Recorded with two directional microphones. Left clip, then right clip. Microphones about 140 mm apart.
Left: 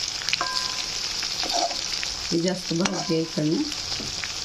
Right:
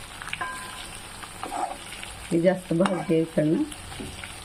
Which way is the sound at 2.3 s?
25° right (ahead or behind).